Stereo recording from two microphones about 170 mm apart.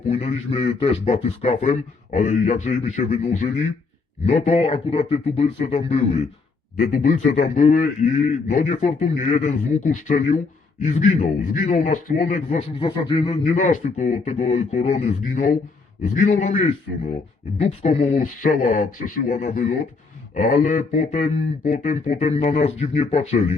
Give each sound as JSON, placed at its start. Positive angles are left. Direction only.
{"t": 0.1, "sound": "a man's voice", "side_deg": 40}
{"t": 6.7, "sound": "a man's voice", "side_deg": 55}
{"t": 12.8, "sound": "a man's voice", "side_deg": 30}